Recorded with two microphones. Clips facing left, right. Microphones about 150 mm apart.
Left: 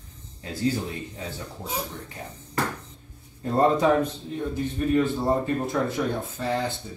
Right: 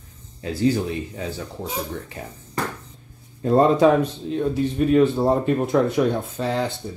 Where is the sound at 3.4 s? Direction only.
90° right.